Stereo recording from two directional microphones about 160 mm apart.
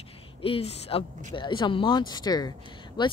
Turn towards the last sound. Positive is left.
turn(degrees=30)  # may be behind; listen again after turning